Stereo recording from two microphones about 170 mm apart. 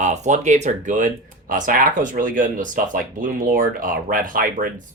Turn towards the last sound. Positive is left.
turn(degrees=-55)  # may be behind; listen again after turning